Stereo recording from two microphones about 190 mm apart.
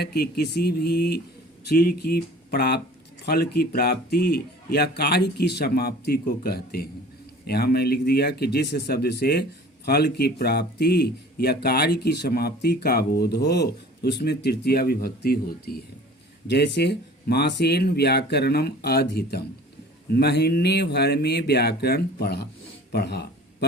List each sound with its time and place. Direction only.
0.0 s speech: 55° left (ahead or behind)
16.5 s speech: 65° left (ahead or behind)
22.9 s a sound: 60° left (ahead or behind)